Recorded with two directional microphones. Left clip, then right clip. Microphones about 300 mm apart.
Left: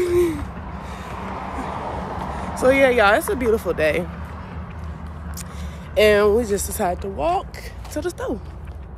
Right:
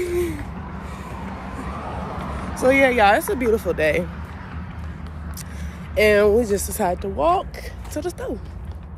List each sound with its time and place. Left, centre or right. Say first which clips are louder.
0.0 s hoot: left 5 dB; centre
1.2 s vehicle: left 7 dB; left
2.6 s speech: even; centre
5.9 s speech: even; centre